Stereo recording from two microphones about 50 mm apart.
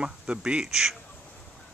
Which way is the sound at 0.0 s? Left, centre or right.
Centre.